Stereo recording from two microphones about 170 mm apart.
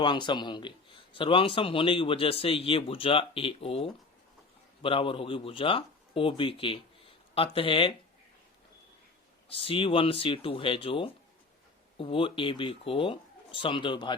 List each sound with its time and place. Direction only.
0.0 s a man's voice: 25° left (ahead or behind)
9.5 s a man's voice: 30° left (ahead or behind)